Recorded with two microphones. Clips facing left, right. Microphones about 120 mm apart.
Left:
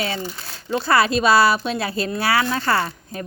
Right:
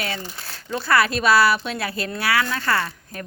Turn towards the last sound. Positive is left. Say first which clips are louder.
# left 3 dB
turn(degrees=25)  # may be behind; listen again after turning